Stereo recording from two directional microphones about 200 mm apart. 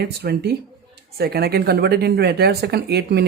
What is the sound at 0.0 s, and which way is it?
Speech, 55° right (ahead or behind).